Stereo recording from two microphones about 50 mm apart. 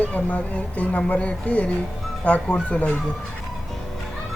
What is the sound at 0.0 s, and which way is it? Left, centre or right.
Speech, left.